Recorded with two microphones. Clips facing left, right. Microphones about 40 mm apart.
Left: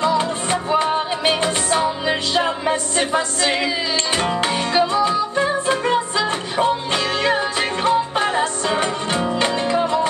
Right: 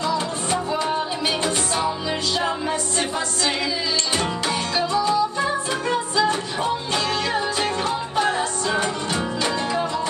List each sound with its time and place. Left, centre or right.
0.0 s music: left
4.7 s music: left